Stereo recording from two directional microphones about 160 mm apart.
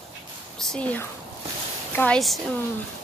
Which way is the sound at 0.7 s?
10° left (ahead or behind).